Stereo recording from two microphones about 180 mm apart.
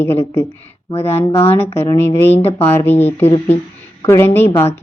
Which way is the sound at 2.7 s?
15° left (ahead or behind).